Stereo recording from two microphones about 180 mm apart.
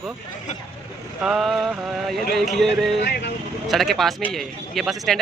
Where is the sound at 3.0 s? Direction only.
65° left (ahead or behind).